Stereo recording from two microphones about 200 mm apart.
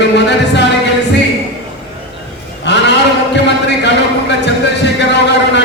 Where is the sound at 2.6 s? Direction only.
60° left (ahead or behind).